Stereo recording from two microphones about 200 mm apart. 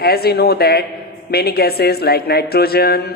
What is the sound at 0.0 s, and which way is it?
Speech, 50° left (ahead or behind).